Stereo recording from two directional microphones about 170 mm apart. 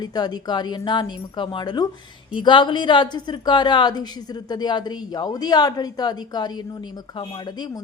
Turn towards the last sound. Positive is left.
turn(degrees=25)  # may be behind; listen again after turning